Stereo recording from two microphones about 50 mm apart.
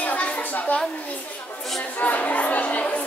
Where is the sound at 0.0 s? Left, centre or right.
Left.